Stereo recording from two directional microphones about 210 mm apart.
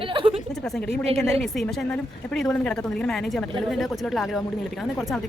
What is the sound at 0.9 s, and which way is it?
Speech, 30° right (ahead or behind).